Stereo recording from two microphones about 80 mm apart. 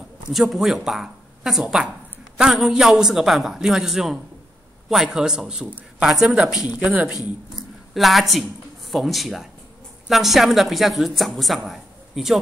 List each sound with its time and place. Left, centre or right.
0.3 s speech: centre
6.8 s speech: centre
7.5 s a sound: centre
8.9 s speech: centre